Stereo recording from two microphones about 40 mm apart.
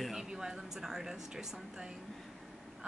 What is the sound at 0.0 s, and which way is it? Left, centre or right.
Speech, centre.